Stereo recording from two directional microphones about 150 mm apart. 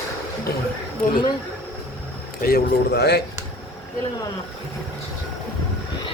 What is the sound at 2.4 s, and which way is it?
Speech, 85° left.